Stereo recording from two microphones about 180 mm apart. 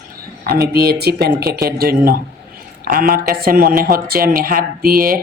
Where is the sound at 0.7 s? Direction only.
60° right (ahead or behind).